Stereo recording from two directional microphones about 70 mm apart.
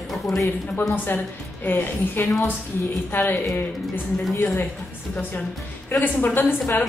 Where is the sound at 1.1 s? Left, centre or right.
Left.